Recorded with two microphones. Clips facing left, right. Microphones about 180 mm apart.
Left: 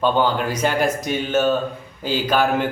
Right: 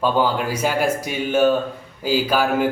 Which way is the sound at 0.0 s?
5° right (ahead or behind).